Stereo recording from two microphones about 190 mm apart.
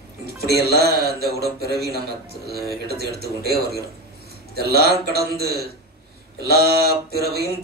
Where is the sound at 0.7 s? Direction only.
55° right (ahead or behind).